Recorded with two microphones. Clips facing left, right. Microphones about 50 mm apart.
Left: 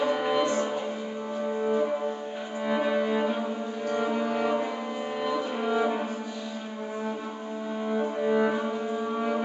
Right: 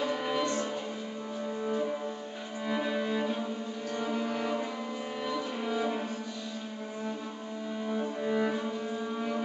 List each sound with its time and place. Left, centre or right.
0.0 s music: centre
2.6 s cello: centre
3.9 s music: centre
7.8 s music: centre